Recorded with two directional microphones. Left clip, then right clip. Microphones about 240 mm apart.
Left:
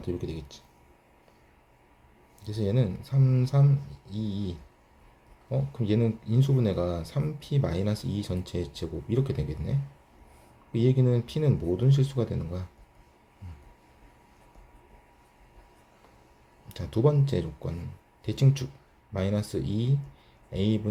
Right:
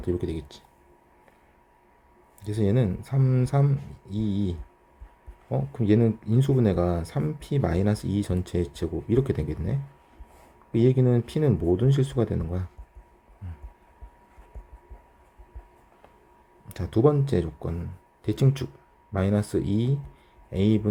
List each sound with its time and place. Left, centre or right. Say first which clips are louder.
0.2 s speech: right 5 dB; left
2.4 s speech: right 4 dB; right
5.5 s speech: right 5 dB; right
16.6 s speech: right 4 dB; right